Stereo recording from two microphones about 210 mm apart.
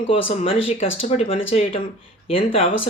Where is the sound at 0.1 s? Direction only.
25° left (ahead or behind).